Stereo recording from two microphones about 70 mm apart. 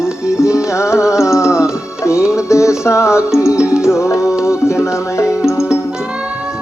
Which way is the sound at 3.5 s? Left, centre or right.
Centre.